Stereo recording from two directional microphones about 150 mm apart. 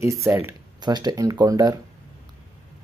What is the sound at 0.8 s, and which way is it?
Speech, 30° right (ahead or behind).